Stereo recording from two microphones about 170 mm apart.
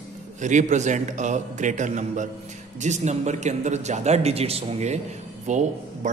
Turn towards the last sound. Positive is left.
turn(degrees=-45)  # may be behind; listen again after turning